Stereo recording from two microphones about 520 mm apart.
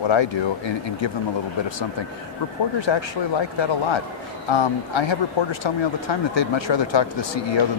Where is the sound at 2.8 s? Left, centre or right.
Left.